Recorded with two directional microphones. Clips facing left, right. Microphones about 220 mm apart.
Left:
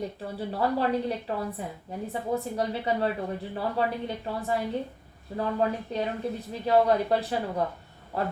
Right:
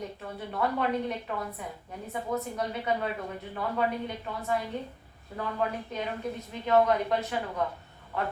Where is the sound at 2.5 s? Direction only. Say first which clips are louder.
Left 3 dB; 35° left (ahead or behind).